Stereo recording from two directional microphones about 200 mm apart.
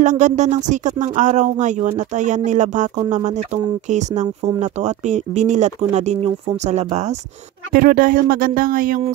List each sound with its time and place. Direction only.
0.0 s speech: 35° right (ahead or behind)
3.9 s speech: 35° right (ahead or behind)
7.7 s speech: 45° right (ahead or behind)